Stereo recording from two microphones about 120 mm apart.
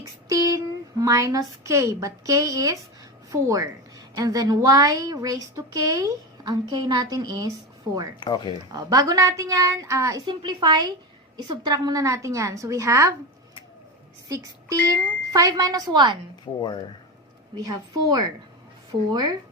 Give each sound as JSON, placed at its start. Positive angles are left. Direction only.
{"t": 0.3, "sound": "a woman's voice", "side_deg": -30}
{"t": 8.2, "sound": "speech", "side_deg": 35}
{"t": 8.7, "sound": "a woman's voice", "side_deg": -30}
{"t": 10.2, "sound": "a woman's voice", "side_deg": -40}
{"t": 14.3, "sound": "speech", "side_deg": -30}
{"t": 16.5, "sound": "speech", "side_deg": 45}
{"t": 17.5, "sound": "speech", "side_deg": -30}